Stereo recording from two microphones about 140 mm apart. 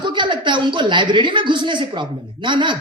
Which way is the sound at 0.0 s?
35° right (ahead or behind).